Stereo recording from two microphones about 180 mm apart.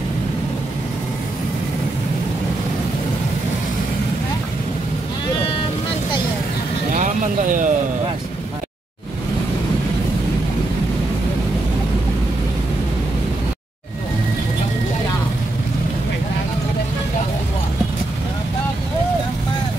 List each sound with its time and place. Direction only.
7.0 s vehicle: 45° right (ahead or behind)